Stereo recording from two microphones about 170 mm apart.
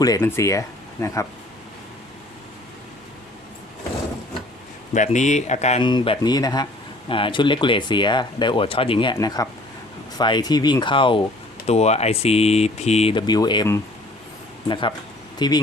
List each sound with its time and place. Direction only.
0.0 s speech: 20° left (ahead or behind)
4.9 s speech: 45° left (ahead or behind)
5.8 s speech: 30° left (ahead or behind)